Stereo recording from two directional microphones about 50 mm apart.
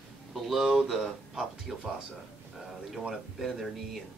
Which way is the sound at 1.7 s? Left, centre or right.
Centre.